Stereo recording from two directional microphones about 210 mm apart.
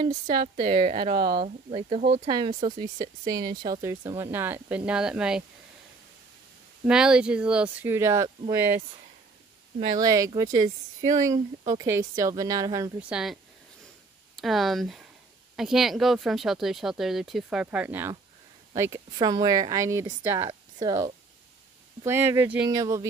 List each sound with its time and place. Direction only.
0.4 s a woman's voice: 40° right (ahead or behind)
0.7 s speech: 25° right (ahead or behind); by 5.4 s 5° right (ahead or behind)
6.9 s speech: 5° right (ahead or behind)
9.9 s speech: 15° right (ahead or behind)
13.1 s speech: centre (ahead or behind)